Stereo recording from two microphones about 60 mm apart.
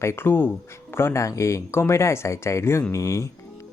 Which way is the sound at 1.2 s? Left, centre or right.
Left.